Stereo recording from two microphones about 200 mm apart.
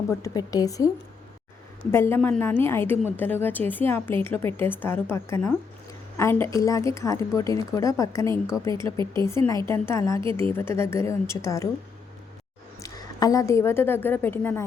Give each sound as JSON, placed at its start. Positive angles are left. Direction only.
{"t": 0.1, "sound": "a woman's voice", "side_deg": 15}
{"t": 1.9, "sound": "a woman's voice", "side_deg": 10}
{"t": 12.8, "sound": "a woman's voice", "side_deg": 20}